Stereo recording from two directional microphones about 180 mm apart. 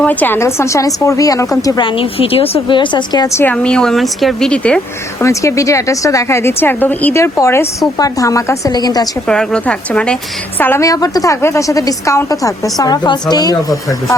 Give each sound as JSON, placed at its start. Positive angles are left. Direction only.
{"t": 0.0, "sound": "a woman's voice", "side_deg": 10}
{"t": 3.4, "sound": "speech", "side_deg": 5}
{"t": 5.2, "sound": "a woman's voice", "side_deg": 15}
{"t": 9.2, "sound": "a woman's voice", "side_deg": 5}